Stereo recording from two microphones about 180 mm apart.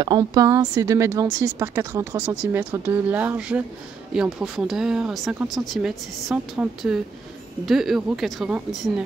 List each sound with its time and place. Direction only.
0.0 s a woman's voice: 20° right (ahead or behind); by 9.0 s 5° right (ahead or behind)